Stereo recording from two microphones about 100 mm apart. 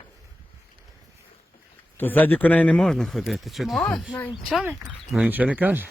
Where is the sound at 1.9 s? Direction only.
20° left (ahead or behind).